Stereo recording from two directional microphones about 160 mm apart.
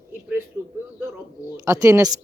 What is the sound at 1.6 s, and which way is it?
Speech, 20° right (ahead or behind).